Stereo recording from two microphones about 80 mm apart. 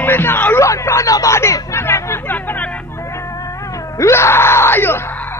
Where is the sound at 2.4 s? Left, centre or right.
Left.